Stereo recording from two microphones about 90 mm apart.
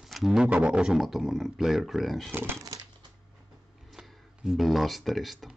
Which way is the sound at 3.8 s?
5° right (ahead or behind).